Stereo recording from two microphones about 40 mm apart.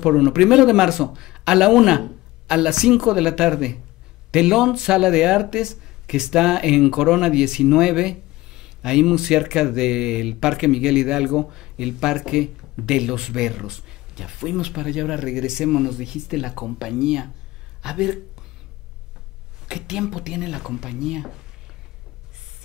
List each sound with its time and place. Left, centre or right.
0.0 s speech: centre
19.7 s speech: centre